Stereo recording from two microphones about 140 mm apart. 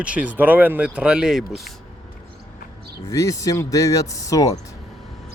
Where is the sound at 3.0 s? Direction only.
20° left (ahead or behind).